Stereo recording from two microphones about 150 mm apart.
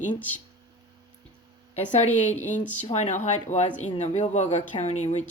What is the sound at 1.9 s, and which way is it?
Speech, 50° left (ahead or behind).